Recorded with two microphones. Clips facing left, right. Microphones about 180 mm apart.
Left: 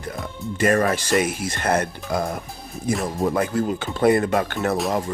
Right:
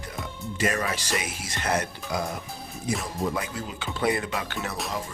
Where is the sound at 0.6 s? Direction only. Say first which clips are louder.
Left 8 dB; 50° left (ahead or behind).